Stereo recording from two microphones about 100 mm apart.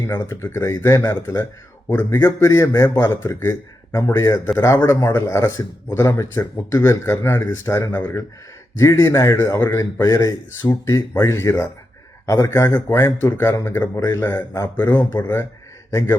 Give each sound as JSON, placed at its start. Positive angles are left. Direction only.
{"t": 0.1, "sound": "a man's voice", "side_deg": 25}